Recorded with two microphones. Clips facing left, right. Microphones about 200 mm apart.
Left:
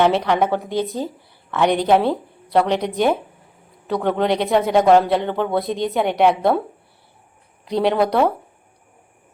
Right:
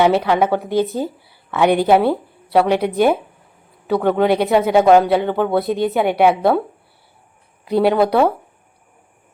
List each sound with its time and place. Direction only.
0.0 s a woman's voice: 5° right (ahead or behind)
7.6 s a woman's voice: 5° right (ahead or behind)